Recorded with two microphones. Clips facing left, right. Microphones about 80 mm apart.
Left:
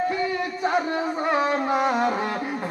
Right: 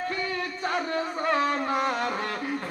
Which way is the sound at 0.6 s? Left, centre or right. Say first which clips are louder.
Left 5 dB; centre.